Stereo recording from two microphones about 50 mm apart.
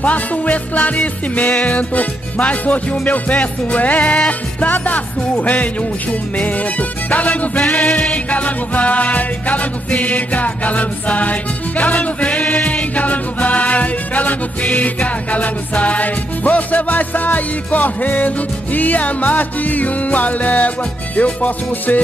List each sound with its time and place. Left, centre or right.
0.0 s music: left